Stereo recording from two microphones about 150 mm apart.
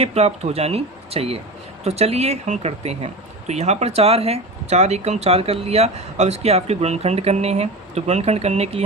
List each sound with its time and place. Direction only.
0.0 s speech: 45° right (ahead or behind)